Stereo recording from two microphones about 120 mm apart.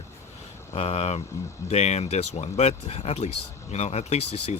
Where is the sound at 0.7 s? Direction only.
55° left (ahead or behind).